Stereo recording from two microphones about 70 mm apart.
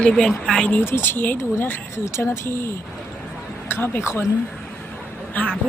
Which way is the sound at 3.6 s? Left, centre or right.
Left.